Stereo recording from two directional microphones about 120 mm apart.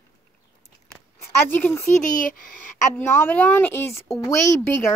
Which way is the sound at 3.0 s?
20° left (ahead or behind).